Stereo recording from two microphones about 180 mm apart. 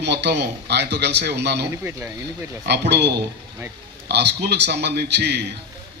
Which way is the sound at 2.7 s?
70° right (ahead or behind).